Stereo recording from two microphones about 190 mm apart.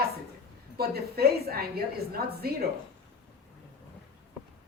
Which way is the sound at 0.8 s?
55° right (ahead or behind).